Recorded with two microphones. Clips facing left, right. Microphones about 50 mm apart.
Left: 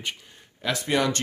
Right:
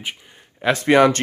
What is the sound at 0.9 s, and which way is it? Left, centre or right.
Speech, right.